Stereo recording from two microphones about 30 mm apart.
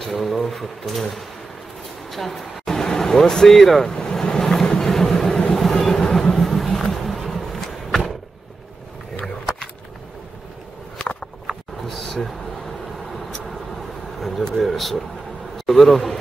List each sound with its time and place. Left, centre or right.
0.0 s speech: centre
2.0 s speech: centre
3.9 s vehicle: left
7.6 s skateboard: centre
11.9 s a sound: centre
13.1 s vehicle: centre
14.6 s a sound: centre
15.5 s a man's voice: centre